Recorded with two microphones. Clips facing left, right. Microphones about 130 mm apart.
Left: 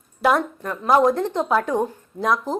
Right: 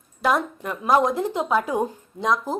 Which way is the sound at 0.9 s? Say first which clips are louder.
Left 3 dB; centre (ahead or behind).